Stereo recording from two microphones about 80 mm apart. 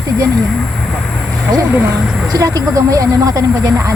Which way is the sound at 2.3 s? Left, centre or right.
Right.